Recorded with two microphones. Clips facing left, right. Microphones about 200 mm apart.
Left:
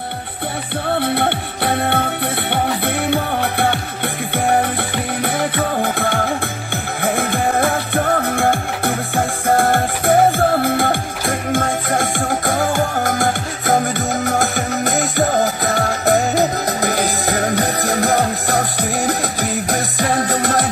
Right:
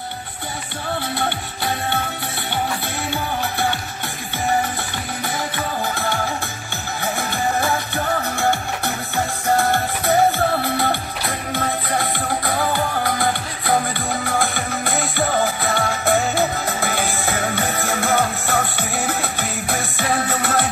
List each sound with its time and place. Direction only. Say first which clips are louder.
0.9 s music: left 6 dB; 60° left (ahead or behind); by 20.6 s 40° left (ahead or behind)